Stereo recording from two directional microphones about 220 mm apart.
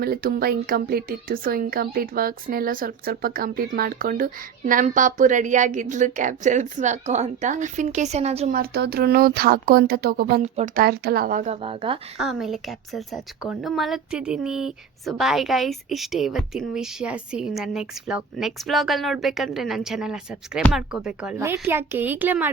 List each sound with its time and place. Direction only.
0.0 s speech: 45° right (ahead or behind)
8.5 s speech: 45° right (ahead or behind)
11.6 s speech: 25° right (ahead or behind)
12.2 s a woman's voice: centre (ahead or behind)